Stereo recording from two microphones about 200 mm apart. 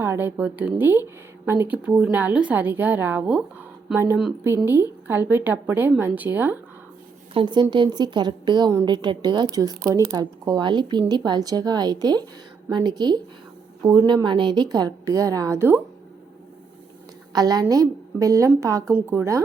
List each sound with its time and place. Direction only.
0.0 s a woman's voice: 10° right (ahead or behind)
7.3 s a woman's voice: 25° right (ahead or behind)
17.3 s a woman's voice: 20° right (ahead or behind)